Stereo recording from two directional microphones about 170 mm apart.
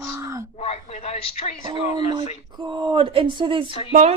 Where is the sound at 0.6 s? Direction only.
40° left (ahead or behind).